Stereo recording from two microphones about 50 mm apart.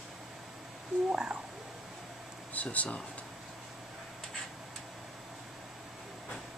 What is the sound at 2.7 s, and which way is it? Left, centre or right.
Speech, left.